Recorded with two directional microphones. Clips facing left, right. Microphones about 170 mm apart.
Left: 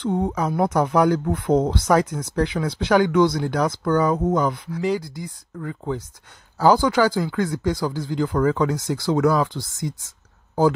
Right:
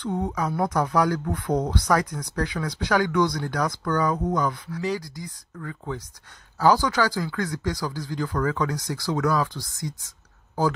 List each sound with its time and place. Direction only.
0.0 s speech: 25° left (ahead or behind)